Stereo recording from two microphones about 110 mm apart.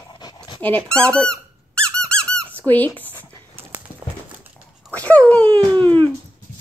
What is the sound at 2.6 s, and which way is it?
Speech, 15° left (ahead or behind).